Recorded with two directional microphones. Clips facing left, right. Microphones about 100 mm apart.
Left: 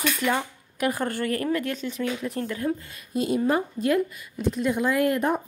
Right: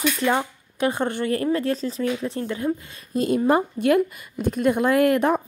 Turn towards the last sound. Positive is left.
turn(degrees=-85)